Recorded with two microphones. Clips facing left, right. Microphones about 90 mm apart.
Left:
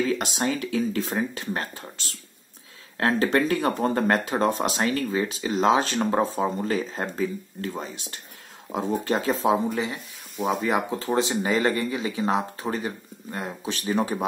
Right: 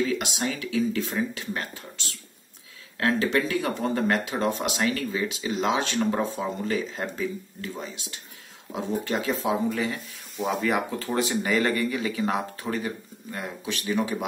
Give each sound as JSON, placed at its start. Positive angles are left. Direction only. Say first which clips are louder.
{"t": 0.1, "sound": "speech", "louder": "left 3 dB", "side_deg": 40}
{"t": 10.6, "sound": "speech", "louder": "left 1 dB", "side_deg": 20}